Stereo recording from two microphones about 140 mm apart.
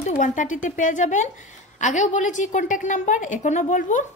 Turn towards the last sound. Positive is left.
turn(degrees=60)  # may be behind; listen again after turning